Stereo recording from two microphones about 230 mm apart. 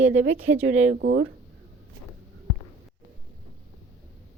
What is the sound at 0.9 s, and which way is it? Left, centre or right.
Speech, right.